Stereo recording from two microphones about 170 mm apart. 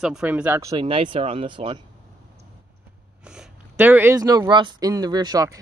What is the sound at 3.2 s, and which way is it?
Speech, 5° right (ahead or behind).